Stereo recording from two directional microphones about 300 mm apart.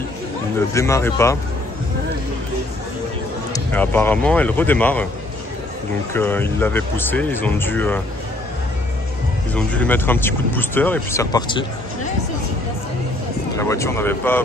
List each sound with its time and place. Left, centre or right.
0.6 s speech: centre
3.5 s speech: centre
6.1 s speech: centre
9.5 s speech: centre
13.6 s speech: centre